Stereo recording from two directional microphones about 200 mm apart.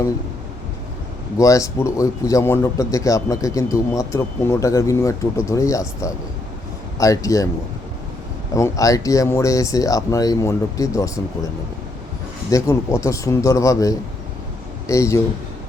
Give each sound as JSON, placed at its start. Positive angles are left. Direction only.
{"t": 1.4, "sound": "a man's voice", "side_deg": 15}
{"t": 8.5, "sound": "a man's voice", "side_deg": 15}
{"t": 12.5, "sound": "a man's voice", "side_deg": 15}